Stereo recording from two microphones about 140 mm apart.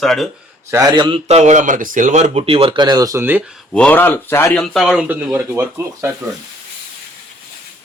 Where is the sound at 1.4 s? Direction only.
60° right (ahead or behind); by 3.3 s 25° right (ahead or behind).